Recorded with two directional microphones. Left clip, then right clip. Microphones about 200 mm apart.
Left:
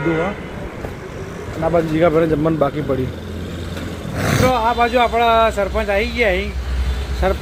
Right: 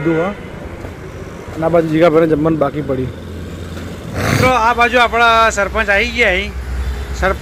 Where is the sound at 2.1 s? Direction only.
25° right (ahead or behind).